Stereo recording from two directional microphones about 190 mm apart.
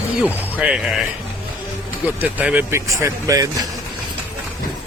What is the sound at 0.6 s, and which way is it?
Speech, 5° right (ahead or behind).